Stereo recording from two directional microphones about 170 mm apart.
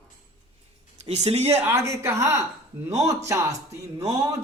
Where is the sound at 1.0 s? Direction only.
40° right (ahead or behind).